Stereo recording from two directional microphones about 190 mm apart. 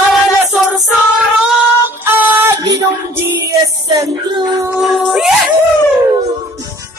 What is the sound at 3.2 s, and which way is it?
Music, 15° right (ahead or behind).